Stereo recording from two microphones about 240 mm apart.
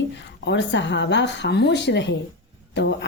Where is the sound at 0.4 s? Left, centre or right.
Left.